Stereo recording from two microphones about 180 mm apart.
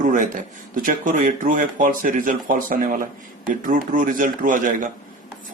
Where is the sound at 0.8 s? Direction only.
50° right (ahead or behind).